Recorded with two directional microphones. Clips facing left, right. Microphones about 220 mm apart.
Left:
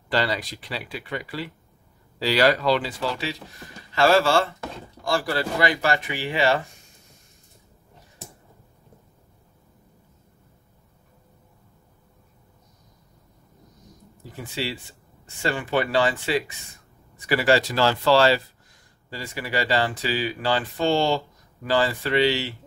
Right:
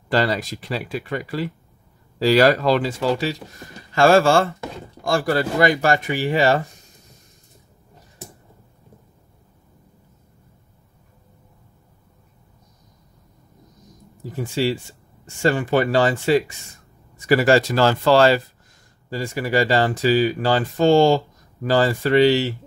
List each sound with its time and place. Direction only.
0.1 s speech: 45° right (ahead or behind)
14.3 s speech: 45° right (ahead or behind)